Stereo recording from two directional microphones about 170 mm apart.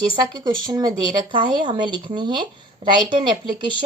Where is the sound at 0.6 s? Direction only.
25° right (ahead or behind).